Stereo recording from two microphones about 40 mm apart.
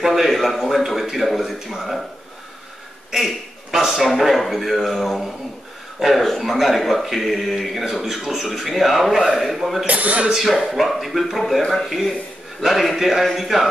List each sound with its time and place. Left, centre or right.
0.0 s a man's voice: centre
3.1 s a sound: centre
3.8 s a man's voice: centre
9.8 s speech: right
10.3 s a man's voice: centre
12.6 s a man's voice: centre